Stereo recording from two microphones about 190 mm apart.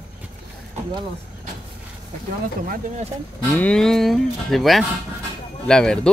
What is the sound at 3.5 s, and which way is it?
Speech, 5° left (ahead or behind).